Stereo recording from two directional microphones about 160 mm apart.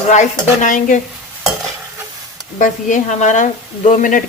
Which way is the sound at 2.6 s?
50° left (ahead or behind).